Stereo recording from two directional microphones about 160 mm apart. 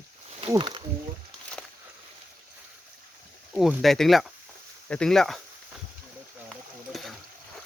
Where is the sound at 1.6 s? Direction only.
5° left (ahead or behind).